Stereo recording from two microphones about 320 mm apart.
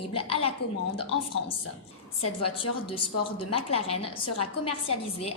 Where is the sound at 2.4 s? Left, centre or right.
Centre.